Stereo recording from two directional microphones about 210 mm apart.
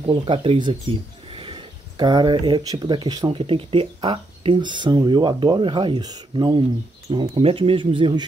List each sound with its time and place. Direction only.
0.0 s speech: 25° right (ahead or behind)